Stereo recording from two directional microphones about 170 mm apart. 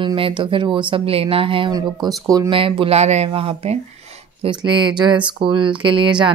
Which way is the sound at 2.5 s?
30° right (ahead or behind).